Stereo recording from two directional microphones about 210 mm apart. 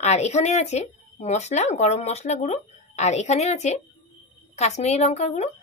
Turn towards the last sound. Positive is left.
turn(degrees=30)  # may be behind; listen again after turning